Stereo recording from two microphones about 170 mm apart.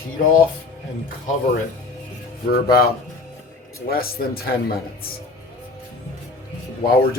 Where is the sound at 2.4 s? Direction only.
65° left (ahead or behind).